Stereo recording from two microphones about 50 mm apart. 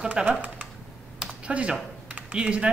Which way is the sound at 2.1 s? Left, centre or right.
Right.